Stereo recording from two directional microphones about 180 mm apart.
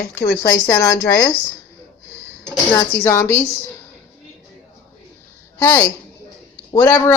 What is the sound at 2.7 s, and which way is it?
Speech, 15° left (ahead or behind).